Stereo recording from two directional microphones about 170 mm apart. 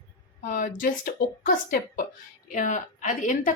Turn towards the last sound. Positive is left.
turn(degrees=50)  # may be behind; listen again after turning